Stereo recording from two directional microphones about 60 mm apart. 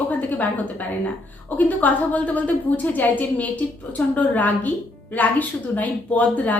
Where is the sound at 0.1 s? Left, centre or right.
Left.